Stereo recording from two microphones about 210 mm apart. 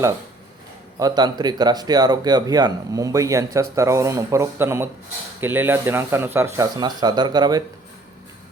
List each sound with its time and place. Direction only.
0.9 s speech: 20° right (ahead or behind)